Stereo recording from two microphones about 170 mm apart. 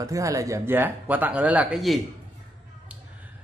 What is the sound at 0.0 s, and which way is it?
Speech, 20° right (ahead or behind).